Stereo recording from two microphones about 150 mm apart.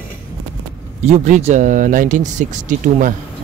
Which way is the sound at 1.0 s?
55° right (ahead or behind).